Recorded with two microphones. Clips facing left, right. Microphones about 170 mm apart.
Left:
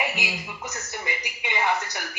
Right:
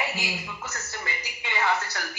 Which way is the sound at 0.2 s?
15° left (ahead or behind).